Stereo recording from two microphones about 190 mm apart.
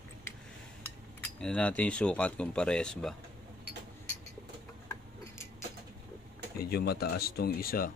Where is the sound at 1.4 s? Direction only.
5° left (ahead or behind).